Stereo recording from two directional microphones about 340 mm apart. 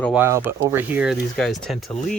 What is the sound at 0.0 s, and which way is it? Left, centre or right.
Speech, centre.